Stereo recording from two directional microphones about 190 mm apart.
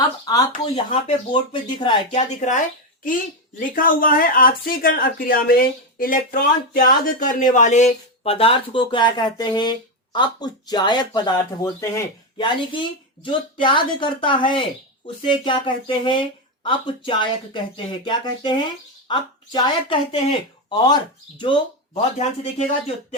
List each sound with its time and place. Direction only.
0.3 s speech: 20° left (ahead or behind)
2.0 s speech: 40° left (ahead or behind); by 21.6 s 25° left (ahead or behind)
21.9 s speech: 35° left (ahead or behind)